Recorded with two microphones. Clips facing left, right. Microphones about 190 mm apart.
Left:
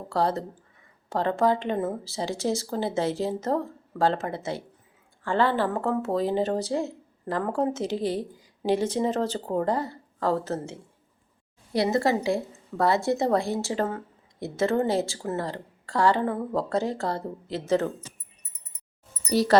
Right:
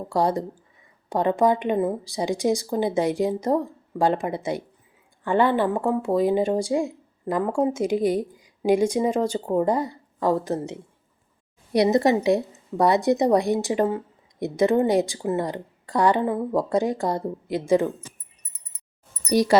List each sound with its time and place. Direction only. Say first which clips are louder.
0.1 s a woman's voice: right 3 dB; 15° right (ahead or behind)
19.3 s a woman's voice: right 3 dB; 15° right (ahead or behind)